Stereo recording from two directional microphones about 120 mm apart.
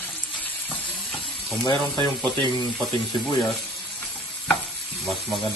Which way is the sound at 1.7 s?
40° right (ahead or behind).